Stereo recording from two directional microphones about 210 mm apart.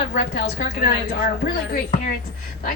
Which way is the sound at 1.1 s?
45° left (ahead or behind).